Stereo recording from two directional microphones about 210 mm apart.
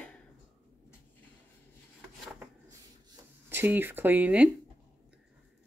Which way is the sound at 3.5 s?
10° right (ahead or behind).